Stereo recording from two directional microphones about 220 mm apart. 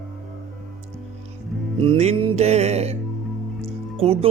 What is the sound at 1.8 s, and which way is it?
Speech, 25° right (ahead or behind).